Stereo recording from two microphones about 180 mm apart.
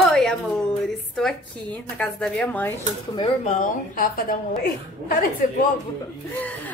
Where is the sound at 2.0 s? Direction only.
5° left (ahead or behind).